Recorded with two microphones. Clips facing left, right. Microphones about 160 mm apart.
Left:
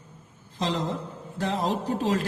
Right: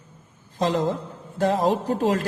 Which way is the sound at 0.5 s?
50° right (ahead or behind).